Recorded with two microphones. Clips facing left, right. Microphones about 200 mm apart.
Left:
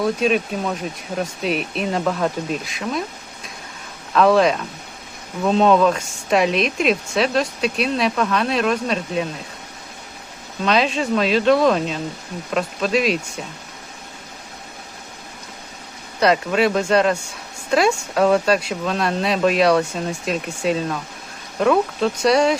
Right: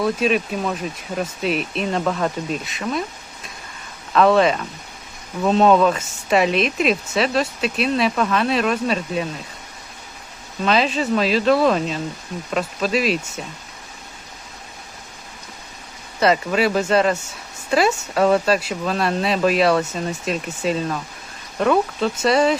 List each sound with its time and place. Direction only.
0.0 s speech: centre (ahead or behind)
4.1 s speech: centre (ahead or behind)
10.6 s speech: centre (ahead or behind)
16.2 s speech: centre (ahead or behind)